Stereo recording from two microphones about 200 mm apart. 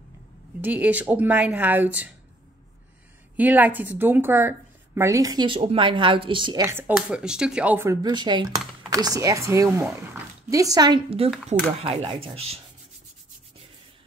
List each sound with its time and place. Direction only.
0.6 s a woman's voice: 10° right (ahead or behind)
3.3 s a woman's voice: 10° right (ahead or behind); by 12.2 s 30° right (ahead or behind)